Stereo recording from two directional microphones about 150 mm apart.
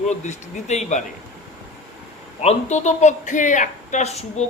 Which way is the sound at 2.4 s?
45° left (ahead or behind).